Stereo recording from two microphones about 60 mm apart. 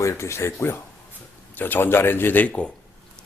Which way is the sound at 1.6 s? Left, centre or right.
Left.